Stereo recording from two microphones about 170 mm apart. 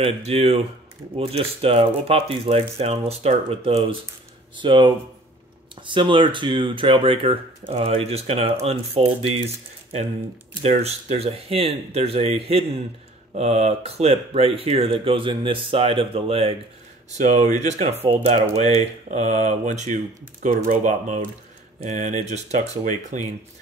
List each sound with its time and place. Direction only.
0.0 s speech: 35° right (ahead or behind)
10.6 s speech: 35° right (ahead or behind)
17.1 s speech: 45° right (ahead or behind)